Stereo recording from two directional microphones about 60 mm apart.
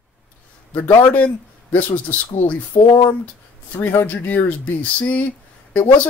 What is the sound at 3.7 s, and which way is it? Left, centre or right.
Speech, left.